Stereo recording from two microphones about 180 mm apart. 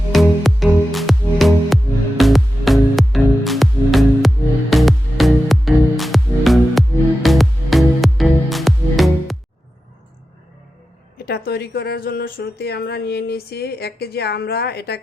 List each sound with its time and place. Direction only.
0.1 s music: centre (ahead or behind)
11.3 s speech: 65° left (ahead or behind)